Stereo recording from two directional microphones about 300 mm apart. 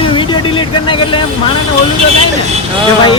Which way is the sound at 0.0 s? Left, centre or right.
Centre.